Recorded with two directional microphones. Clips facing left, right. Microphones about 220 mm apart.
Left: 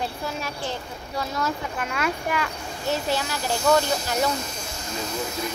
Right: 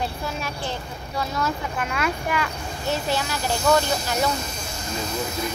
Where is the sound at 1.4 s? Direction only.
40° left (ahead or behind).